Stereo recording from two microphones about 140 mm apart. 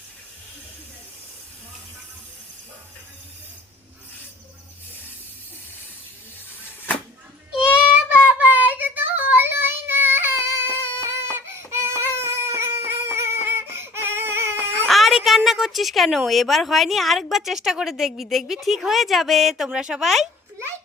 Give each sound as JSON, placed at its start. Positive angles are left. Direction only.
{"t": 7.5, "sound": "child singing", "side_deg": -10}
{"t": 14.8, "sound": "a woman's voice", "side_deg": 0}